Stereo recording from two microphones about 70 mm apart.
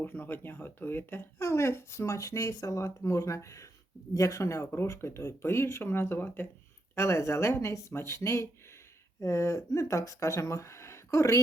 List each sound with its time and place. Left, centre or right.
0.0 s speech: left
6.9 s speech: left